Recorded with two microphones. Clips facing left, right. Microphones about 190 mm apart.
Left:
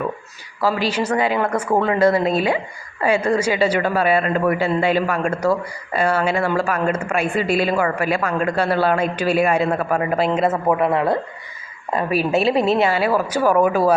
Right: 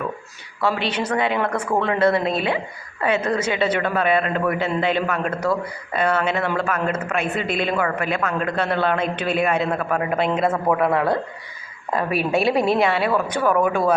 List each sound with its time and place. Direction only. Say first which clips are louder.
0.6 s a man's voice: left 3 dB; 5° left (ahead or behind)
10.8 s speech: left 1 dB; 25° left (ahead or behind)
12.3 s speech: left 1 dB; 25° left (ahead or behind)
12.7 s speech: left 2 dB; 5° left (ahead or behind)